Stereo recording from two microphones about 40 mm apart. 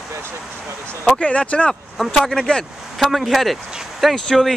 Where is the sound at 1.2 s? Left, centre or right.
Left.